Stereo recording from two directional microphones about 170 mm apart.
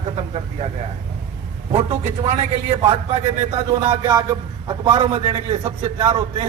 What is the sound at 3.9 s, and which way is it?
A man's voice, 20° right (ahead or behind).